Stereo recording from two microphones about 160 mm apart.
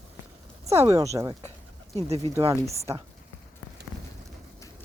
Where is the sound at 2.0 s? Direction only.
40° right (ahead or behind).